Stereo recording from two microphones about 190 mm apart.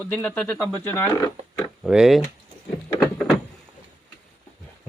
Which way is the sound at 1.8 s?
5° right (ahead or behind).